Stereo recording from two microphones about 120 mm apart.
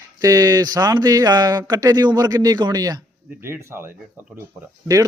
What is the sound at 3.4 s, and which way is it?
Speech, 20° right (ahead or behind).